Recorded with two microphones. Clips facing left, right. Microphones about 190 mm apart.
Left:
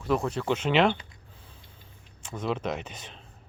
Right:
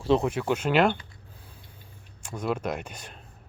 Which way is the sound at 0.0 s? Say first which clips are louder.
Right 4 dB; 25° right (ahead or behind).